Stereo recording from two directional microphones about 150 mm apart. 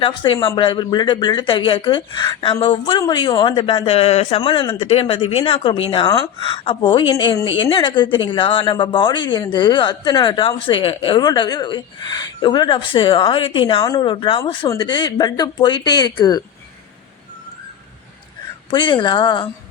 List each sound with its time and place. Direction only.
0.0 s speech: 30° left (ahead or behind)
18.7 s speech: 30° left (ahead or behind)